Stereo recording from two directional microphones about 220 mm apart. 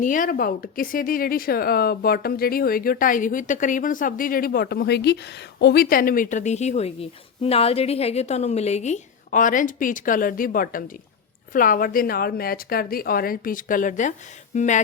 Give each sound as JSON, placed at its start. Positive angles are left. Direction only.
{"t": 0.0, "sound": "speech", "side_deg": 35}